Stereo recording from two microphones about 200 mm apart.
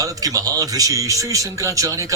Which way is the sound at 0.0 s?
15° right (ahead or behind).